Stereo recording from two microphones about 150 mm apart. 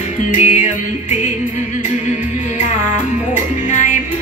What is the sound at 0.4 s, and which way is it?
Music, 50° left (ahead or behind).